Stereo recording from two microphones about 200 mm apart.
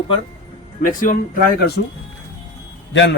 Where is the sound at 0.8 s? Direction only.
45° left (ahead or behind).